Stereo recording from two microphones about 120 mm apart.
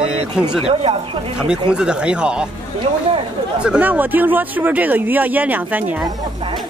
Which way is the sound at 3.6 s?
10° right (ahead or behind).